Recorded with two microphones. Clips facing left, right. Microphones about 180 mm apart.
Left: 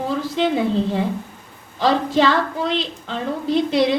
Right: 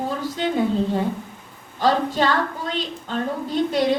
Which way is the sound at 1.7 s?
90° left.